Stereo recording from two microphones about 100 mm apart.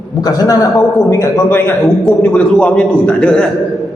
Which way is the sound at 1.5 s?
20° left (ahead or behind).